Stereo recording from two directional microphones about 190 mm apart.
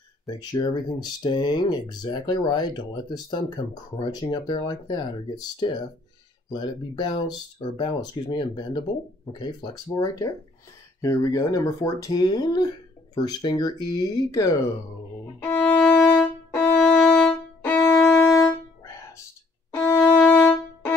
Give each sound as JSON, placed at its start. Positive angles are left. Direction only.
{"t": 0.3, "sound": "speech", "side_deg": 20}
{"t": 15.4, "sound": "violin", "side_deg": 10}
{"t": 19.7, "sound": "music", "side_deg": 10}